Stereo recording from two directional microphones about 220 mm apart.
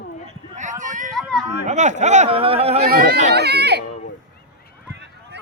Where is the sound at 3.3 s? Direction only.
50° right (ahead or behind).